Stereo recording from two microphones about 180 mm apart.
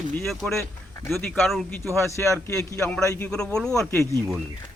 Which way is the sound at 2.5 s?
15° left (ahead or behind).